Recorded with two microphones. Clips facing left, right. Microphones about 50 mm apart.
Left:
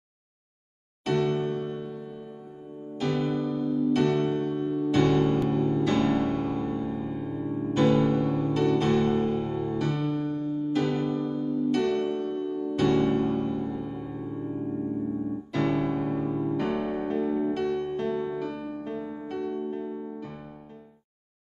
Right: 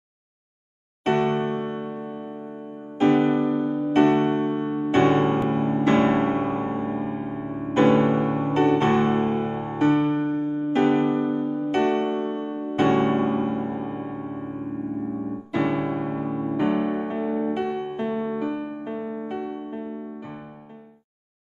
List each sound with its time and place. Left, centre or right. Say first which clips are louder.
1.0 s music: right 4 dB; right
15.5 s electric piano: right 3 dB; centre